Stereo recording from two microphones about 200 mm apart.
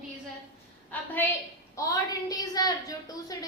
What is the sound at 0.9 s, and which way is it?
A woman's voice, 10° left (ahead or behind).